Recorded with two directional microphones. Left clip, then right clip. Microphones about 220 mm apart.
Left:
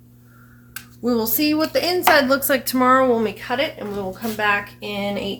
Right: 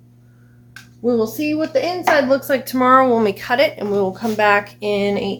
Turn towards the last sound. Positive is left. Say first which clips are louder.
# right 7 dB
turn(degrees=-50)  # may be behind; listen again after turning